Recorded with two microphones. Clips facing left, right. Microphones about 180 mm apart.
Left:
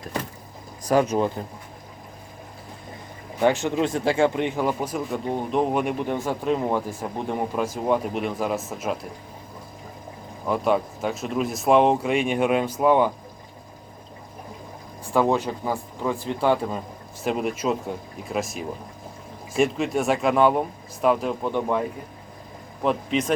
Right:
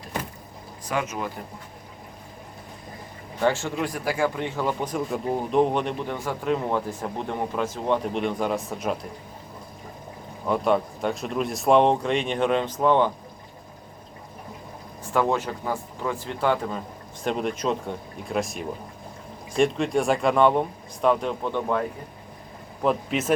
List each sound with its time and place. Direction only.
0.9 s speech: 35° left (ahead or behind)
3.4 s speech: 15° left (ahead or behind); by 9.0 s centre (ahead or behind)
10.4 s speech: centre (ahead or behind)
15.1 s speech: 15° left (ahead or behind)
22.8 s speech: centre (ahead or behind)